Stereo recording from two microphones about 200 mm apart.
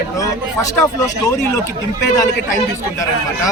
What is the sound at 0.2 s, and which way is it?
Speech, 15° left (ahead or behind).